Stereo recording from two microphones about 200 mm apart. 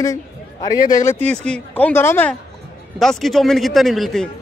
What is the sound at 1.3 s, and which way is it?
A man's voice, 5° left (ahead or behind).